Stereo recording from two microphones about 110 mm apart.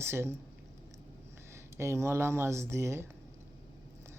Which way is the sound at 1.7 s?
25° right (ahead or behind).